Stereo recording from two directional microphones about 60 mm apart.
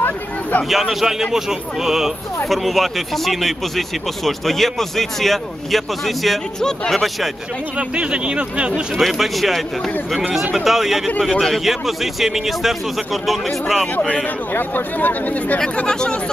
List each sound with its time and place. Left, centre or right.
0.0 s a sound: left
1.0 s speech: centre
7.7 s speech: centre
8.9 s speech: centre
14.5 s speech: left
15.6 s speech: centre